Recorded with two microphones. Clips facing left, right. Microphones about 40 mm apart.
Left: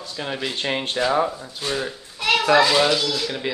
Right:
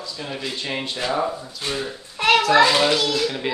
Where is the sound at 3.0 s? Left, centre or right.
Right.